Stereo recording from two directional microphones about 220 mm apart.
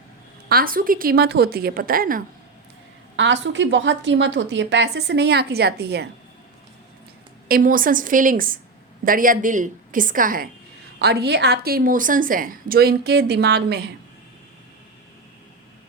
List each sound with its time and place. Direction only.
0.4 s a woman's voice: 40° right (ahead or behind)
3.2 s a woman's voice: 55° right (ahead or behind)
7.4 s a woman's voice: 40° right (ahead or behind)